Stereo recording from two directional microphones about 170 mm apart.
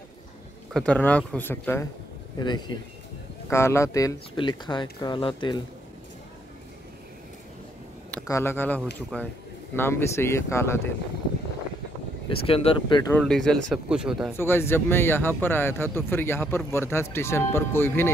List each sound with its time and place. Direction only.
0.7 s speech: 10° left (ahead or behind)
2.3 s speech: 25° left (ahead or behind)
3.4 s speech: 15° left (ahead or behind)
8.3 s speech: 15° left (ahead or behind)
12.3 s speech: 35° left (ahead or behind)
13.2 s speech: centre (ahead or behind)
14.3 s speech: 15° left (ahead or behind)